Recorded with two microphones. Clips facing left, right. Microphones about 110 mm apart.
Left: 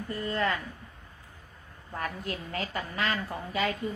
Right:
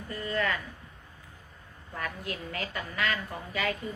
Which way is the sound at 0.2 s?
30° left (ahead or behind).